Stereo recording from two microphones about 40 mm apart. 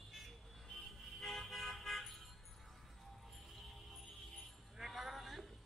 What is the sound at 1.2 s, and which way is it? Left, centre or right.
Toot, centre.